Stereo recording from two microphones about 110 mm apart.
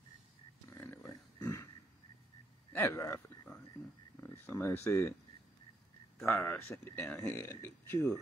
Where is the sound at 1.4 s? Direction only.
30° left (ahead or behind).